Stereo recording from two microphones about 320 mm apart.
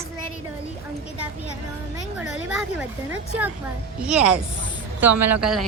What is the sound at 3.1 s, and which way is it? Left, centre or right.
Speech, centre.